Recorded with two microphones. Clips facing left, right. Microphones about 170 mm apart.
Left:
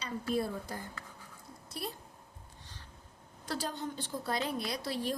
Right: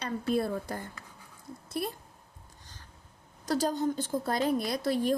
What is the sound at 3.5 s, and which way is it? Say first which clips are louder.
A woman's voice: right 9 dB; 40° right (ahead or behind).